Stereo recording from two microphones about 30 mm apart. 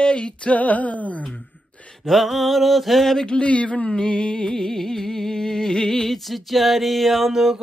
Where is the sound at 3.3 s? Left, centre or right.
Left.